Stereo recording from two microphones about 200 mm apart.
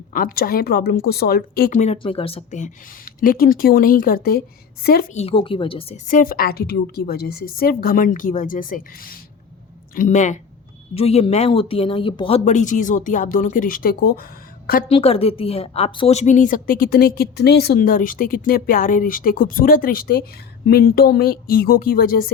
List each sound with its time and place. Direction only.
0.1 s a woman's voice: 45° left (ahead or behind)
5.1 s speech: 30° left (ahead or behind)
6.1 s a woman's voice: 45° left (ahead or behind)
14.8 s a woman's voice: 30° left (ahead or behind); by 22.3 s 45° left (ahead or behind)